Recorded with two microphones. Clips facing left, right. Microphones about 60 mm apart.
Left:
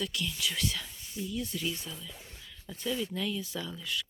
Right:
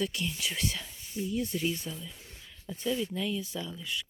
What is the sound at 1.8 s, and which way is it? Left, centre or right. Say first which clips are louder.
Speech: right 3 dB; centre.